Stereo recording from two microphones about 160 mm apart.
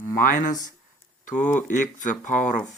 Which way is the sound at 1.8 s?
50° left (ahead or behind).